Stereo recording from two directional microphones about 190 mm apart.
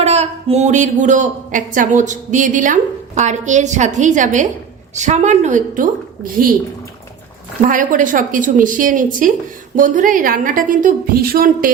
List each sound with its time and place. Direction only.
0.0 s speech: 35° right (ahead or behind)
7.6 s a woman's voice: 45° right (ahead or behind)